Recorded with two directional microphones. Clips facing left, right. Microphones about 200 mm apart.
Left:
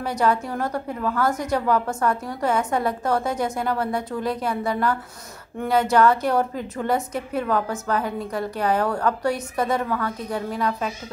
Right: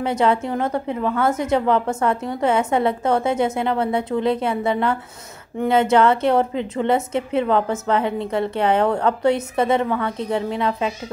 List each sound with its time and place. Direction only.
0.0 s a woman's voice: 25° right (ahead or behind)